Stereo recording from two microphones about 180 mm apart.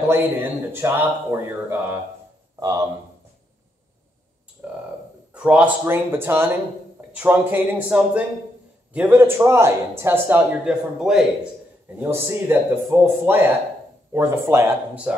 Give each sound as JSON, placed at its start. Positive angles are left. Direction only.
{"t": 0.1, "sound": "a man's voice", "side_deg": -10}
{"t": 4.6, "sound": "frog", "side_deg": -10}
{"t": 5.3, "sound": "speech", "side_deg": -5}
{"t": 12.0, "sound": "speech", "side_deg": -15}